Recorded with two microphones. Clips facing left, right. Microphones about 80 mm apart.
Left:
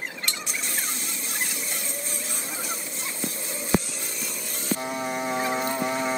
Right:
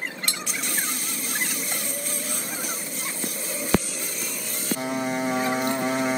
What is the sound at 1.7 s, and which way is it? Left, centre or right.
Vehicle, left.